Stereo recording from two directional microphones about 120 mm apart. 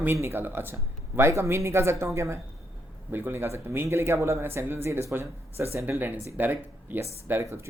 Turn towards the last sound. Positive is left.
turn(degrees=-20)  # may be behind; listen again after turning